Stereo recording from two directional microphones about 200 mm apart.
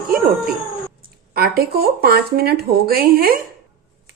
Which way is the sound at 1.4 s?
50° right (ahead or behind).